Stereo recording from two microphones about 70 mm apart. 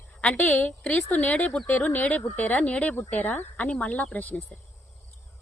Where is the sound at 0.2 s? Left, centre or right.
Centre.